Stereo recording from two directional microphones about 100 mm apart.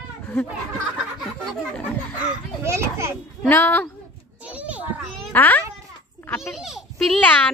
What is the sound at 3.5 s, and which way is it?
Speech, 20° left (ahead or behind).